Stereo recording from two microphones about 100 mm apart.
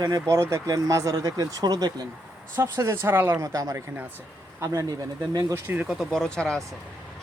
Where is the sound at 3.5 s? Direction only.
35° right (ahead or behind).